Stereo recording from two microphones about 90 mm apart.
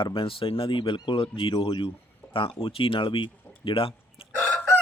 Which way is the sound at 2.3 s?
85° left.